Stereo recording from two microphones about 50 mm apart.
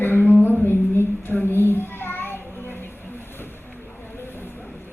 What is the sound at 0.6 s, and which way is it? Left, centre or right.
Child singing, left.